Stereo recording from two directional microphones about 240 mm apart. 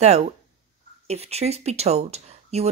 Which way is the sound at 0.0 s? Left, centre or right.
Right.